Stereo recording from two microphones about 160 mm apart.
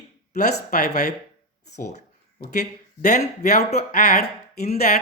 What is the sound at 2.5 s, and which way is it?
Speech, 50° left (ahead or behind).